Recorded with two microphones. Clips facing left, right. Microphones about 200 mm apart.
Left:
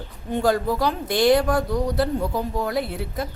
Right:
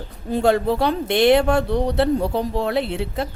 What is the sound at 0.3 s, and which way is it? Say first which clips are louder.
A woman's voice: right 3 dB; 30° right (ahead or behind).